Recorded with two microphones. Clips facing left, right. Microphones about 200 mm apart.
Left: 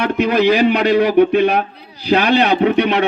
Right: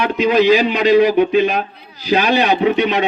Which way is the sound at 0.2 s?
60° left (ahead or behind).